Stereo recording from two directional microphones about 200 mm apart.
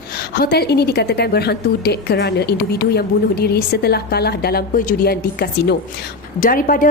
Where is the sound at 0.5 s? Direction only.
50° left (ahead or behind).